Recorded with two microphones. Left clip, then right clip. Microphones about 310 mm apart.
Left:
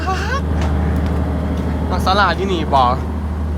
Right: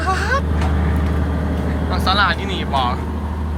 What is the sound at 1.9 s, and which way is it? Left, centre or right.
Speech, centre.